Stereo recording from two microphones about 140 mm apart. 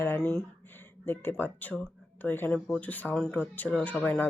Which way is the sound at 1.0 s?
15° left (ahead or behind).